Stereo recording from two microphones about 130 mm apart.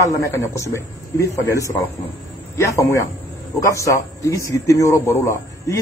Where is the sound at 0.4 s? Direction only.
20° left (ahead or behind).